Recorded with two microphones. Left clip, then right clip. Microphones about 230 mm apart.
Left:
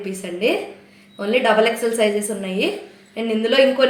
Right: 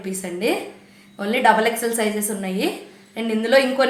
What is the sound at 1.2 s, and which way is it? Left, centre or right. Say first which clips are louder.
Speech: right 1 dB; right.